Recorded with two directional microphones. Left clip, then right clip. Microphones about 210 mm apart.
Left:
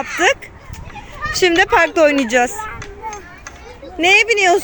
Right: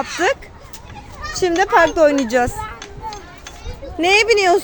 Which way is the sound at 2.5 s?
15° right (ahead or behind).